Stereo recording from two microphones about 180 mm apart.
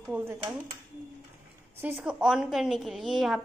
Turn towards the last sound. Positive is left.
turn(degrees=0)  # may be behind; listen again after turning